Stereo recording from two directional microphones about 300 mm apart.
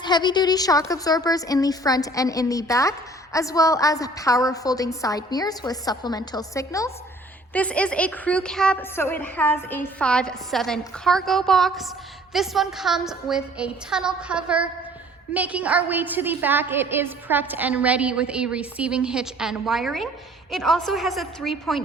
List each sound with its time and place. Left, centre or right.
0.0 s a woman's voice: centre